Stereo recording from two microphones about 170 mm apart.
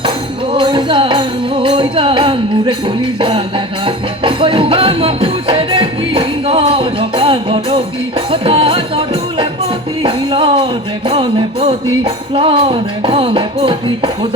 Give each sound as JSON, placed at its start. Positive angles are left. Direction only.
{"t": 0.5, "sound": "music", "side_deg": -30}